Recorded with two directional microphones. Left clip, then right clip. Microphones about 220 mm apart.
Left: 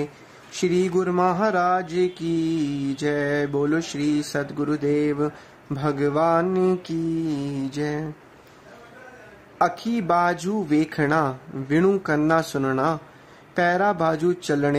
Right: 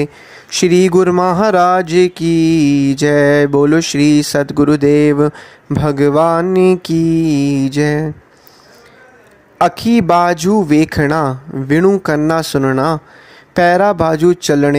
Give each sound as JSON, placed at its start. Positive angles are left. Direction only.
{"t": 0.0, "sound": "speech", "side_deg": -35}
{"t": 9.6, "sound": "speech", "side_deg": -35}